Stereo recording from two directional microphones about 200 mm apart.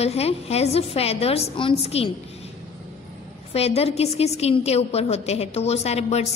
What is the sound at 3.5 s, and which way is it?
A woman's voice, 30° left (ahead or behind).